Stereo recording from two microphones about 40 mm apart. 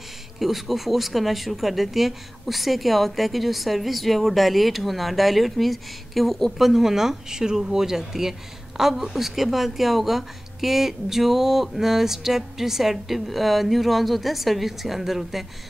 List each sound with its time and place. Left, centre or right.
0.4 s speech: centre